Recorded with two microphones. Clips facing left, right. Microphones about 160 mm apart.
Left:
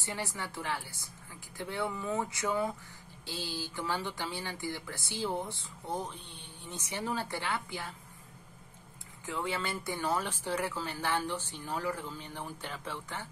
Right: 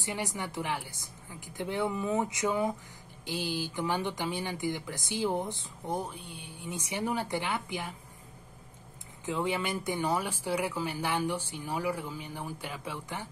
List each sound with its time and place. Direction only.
0.0 s speech: 15° right (ahead or behind)
9.2 s speech: 20° right (ahead or behind)